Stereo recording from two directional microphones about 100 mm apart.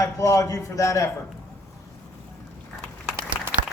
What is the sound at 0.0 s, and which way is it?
A man's voice, 35° left (ahead or behind).